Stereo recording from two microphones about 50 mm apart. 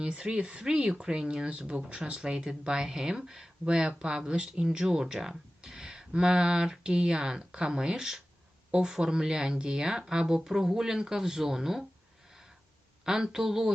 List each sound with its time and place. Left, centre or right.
0.0 s speech: centre
13.1 s speech: centre